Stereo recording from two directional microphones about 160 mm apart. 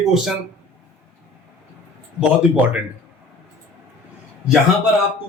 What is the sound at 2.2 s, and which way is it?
Speech, 5° right (ahead or behind).